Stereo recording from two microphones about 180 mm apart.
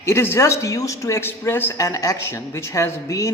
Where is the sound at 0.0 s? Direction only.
15° left (ahead or behind).